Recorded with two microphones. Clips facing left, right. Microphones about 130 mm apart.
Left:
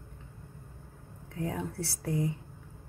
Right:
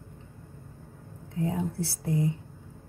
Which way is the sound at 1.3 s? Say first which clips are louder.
Right 5 dB; 25° right (ahead or behind).